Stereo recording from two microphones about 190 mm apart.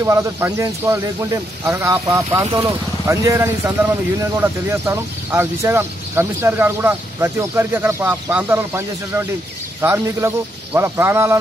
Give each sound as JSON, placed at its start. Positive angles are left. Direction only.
{"t": 0.0, "sound": "speech", "side_deg": -15}